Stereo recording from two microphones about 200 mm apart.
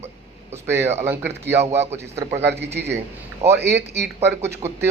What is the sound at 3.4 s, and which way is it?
Speech, 30° right (ahead or behind).